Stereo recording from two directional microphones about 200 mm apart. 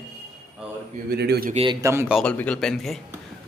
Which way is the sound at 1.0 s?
55° right (ahead or behind).